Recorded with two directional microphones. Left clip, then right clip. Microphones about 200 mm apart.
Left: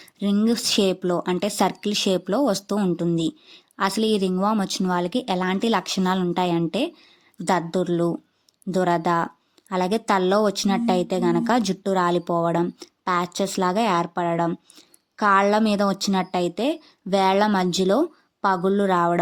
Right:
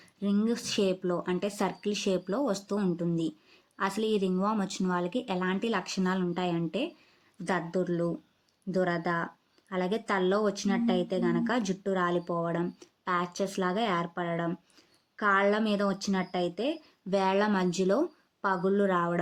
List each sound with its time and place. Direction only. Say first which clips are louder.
0.0 s a woman's voice: left 7 dB; 40° left (ahead or behind)